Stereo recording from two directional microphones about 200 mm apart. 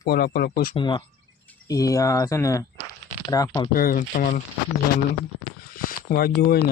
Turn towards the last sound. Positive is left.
turn(degrees=50)  # may be behind; listen again after turning